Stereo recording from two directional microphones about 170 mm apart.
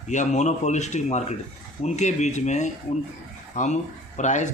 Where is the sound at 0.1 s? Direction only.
45° left (ahead or behind).